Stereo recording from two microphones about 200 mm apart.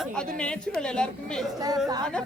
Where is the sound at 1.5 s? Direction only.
20° right (ahead or behind).